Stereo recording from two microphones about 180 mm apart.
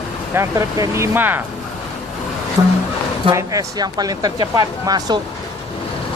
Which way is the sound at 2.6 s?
20° right (ahead or behind).